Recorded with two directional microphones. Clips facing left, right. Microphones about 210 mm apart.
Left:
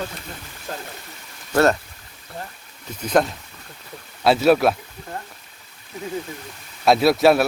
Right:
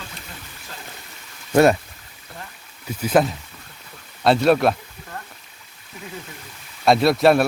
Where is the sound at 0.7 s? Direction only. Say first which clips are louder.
Left 9 dB; 45° left (ahead or behind).